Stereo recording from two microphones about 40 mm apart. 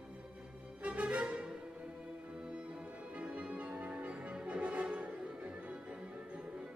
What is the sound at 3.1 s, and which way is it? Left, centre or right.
Music, right.